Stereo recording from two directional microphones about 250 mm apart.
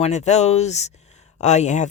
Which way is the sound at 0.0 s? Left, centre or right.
Left.